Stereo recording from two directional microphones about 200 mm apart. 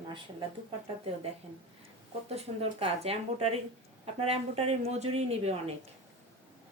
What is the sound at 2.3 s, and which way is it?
A woman's voice, 30° right (ahead or behind).